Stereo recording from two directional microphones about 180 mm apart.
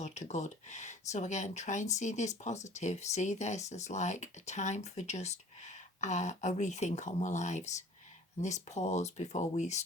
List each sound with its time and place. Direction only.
0.0 s speech: 40° left (ahead or behind)